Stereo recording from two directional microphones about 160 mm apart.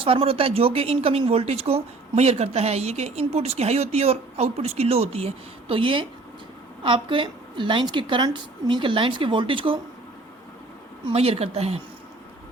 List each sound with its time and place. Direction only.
0.0 s speech: 35° right (ahead or behind)
11.0 s speech: 40° right (ahead or behind)